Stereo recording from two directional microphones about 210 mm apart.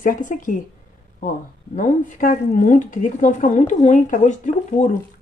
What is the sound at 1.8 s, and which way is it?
Speech, 40° left (ahead or behind).